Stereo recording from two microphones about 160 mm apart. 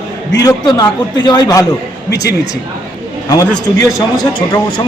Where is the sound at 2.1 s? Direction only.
90° left.